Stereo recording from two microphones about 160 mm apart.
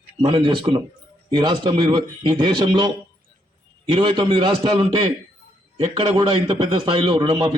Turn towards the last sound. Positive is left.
turn(degrees=-35)  # may be behind; listen again after turning